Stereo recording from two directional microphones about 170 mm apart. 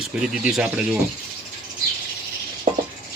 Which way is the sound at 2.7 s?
50° right (ahead or behind).